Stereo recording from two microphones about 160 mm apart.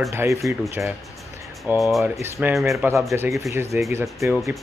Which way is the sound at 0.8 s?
5° right (ahead or behind).